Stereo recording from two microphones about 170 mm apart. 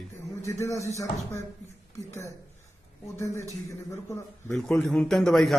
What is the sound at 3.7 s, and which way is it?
Speech, 15° left (ahead or behind).